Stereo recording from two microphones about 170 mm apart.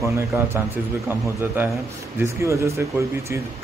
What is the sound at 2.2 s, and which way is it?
Speech, 15° right (ahead or behind).